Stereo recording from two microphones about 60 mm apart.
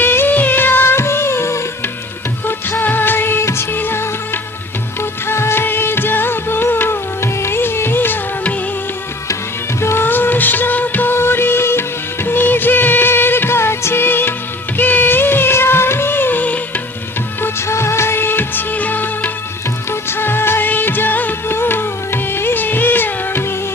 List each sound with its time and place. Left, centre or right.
0.0 s music: left
2.5 s music: left
9.8 s music: left
14.8 s music of bollywood: left
17.4 s music: left
19.9 s music of bollywood: left